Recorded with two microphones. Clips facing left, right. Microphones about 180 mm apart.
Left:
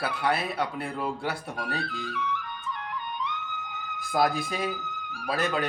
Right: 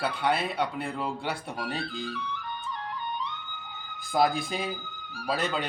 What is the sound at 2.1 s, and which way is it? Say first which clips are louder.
Flute: left 5 dB; 35° right (ahead or behind).